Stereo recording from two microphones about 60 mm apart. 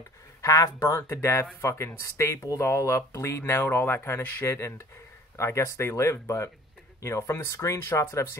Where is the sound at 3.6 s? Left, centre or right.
Left.